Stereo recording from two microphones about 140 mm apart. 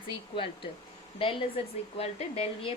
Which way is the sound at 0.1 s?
35° left (ahead or behind).